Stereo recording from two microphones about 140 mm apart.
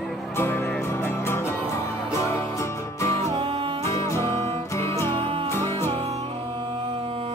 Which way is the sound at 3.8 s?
20° left (ahead or behind).